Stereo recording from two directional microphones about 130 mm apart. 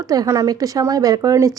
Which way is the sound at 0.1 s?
25° right (ahead or behind).